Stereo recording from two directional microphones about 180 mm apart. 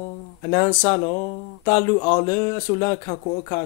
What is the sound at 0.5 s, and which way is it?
Speech, 35° left (ahead or behind).